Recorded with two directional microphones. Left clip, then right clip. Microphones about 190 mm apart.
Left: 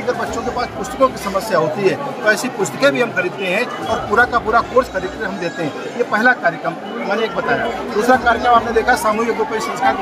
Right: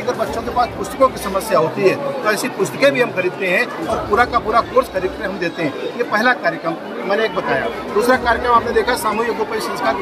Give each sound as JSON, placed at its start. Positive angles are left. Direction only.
{"t": 0.6, "sound": "speech", "side_deg": 0}
{"t": 6.1, "sound": "speech", "side_deg": 0}
{"t": 8.1, "sound": "speech", "side_deg": 0}